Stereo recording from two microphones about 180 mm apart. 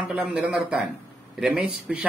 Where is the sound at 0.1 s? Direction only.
5° right (ahead or behind).